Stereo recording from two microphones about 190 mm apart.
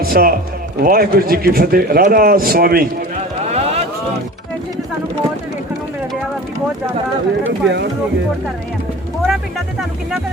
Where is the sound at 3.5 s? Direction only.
35° right (ahead or behind).